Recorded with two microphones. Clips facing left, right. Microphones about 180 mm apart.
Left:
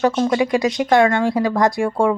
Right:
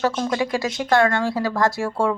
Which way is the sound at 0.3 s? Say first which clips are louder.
Left 5 dB; 15° left (ahead or behind).